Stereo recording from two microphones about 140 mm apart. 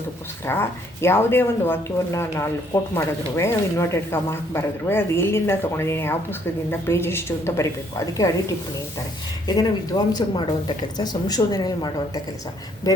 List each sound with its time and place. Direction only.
0.4 s speech: 15° left (ahead or behind)
9.6 s speech: 25° left (ahead or behind)